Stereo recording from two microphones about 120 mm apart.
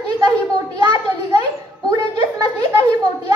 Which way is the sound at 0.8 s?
40° right (ahead or behind).